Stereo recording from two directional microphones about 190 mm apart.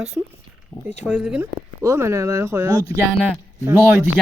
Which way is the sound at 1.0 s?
5° right (ahead or behind).